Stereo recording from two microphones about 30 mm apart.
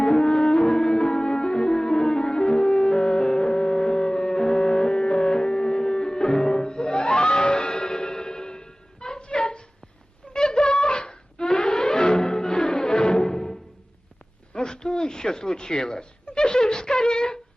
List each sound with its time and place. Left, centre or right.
0.0 s music: left
7.7 s music: left
12.0 s music: left
12.3 s music: centre
14.5 s a sound: left